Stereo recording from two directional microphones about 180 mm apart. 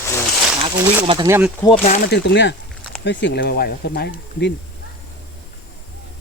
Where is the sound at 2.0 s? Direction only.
70° left (ahead or behind).